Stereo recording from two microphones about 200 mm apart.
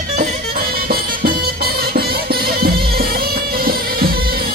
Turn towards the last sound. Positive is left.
turn(degrees=-50)  # may be behind; listen again after turning